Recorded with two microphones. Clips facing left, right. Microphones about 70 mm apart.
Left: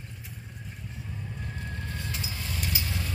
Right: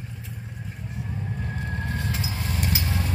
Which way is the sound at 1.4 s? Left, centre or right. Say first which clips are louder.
Right 6 dB; right.